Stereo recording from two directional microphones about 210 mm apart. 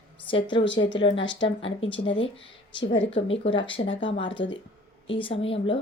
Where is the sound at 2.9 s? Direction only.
60° left (ahead or behind).